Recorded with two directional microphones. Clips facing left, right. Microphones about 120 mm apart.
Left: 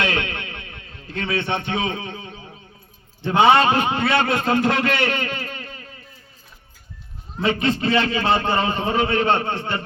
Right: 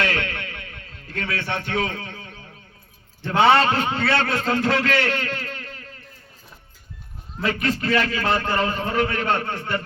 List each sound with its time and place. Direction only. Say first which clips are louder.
0.0 s a sound: left 1 dB; 20° left (ahead or behind)
3.2 s a man's voice: left 2 dB; 20° left (ahead or behind)
7.3 s a man's voice: left 3 dB; 20° left (ahead or behind)